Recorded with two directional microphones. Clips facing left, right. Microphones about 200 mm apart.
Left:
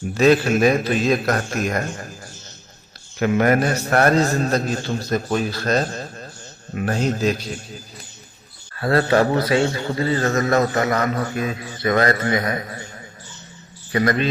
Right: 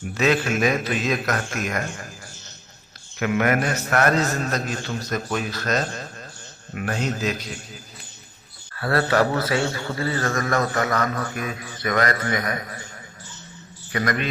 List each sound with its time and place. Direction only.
0.1 s a man's voice: 35° left (ahead or behind)
3.2 s a man's voice: 35° left (ahead or behind)
8.7 s a man's voice: 25° left (ahead or behind)
13.9 s a man's voice: 30° left (ahead or behind)